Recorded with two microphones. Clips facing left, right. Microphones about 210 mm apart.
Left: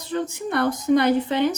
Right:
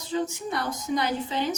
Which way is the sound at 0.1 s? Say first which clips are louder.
Left 3 dB; 60° left (ahead or behind).